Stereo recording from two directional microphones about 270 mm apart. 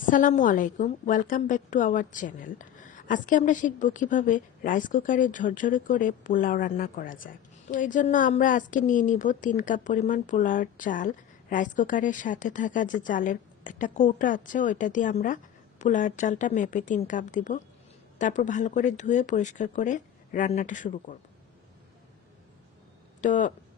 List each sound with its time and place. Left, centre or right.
0.0 s a woman's voice: left
23.2 s a woman's voice: left